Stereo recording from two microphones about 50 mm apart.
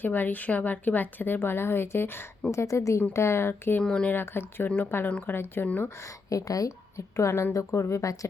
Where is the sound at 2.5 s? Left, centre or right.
Left.